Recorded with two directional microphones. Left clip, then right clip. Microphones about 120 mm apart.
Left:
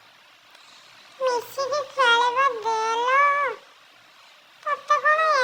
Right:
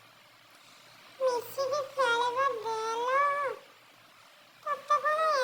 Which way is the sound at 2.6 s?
50° left (ahead or behind).